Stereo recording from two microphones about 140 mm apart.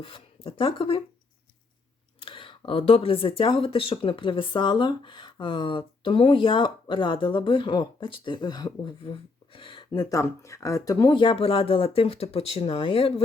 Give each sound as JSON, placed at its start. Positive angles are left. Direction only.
{"t": 0.0, "sound": "speech", "side_deg": 40}
{"t": 2.2, "sound": "speech", "side_deg": 40}